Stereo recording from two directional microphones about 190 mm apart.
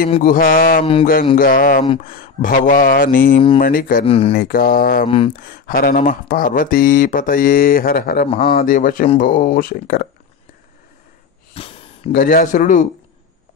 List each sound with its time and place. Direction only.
0.2 s speech: 50° left (ahead or behind)
4.0 s speech: 30° left (ahead or behind)
4.3 s speech: 50° left (ahead or behind)
5.0 s speech: 30° left (ahead or behind)
5.4 s speech: 50° left (ahead or behind)
8.3 s speech: 30° left (ahead or behind)
8.6 s speech: 45° left (ahead or behind)
11.5 s a sound: 30° left (ahead or behind)
12.1 s speech: 50° left (ahead or behind)